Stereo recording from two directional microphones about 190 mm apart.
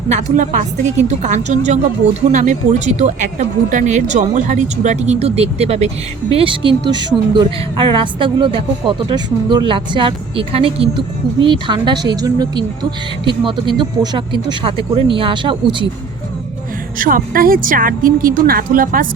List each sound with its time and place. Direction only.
0.1 s speech: 40° right (ahead or behind)
17.0 s speech: 50° right (ahead or behind)